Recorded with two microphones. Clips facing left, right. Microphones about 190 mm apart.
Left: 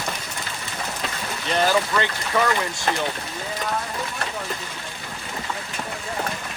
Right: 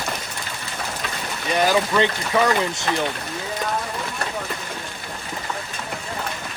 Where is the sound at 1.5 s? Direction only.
15° right (ahead or behind).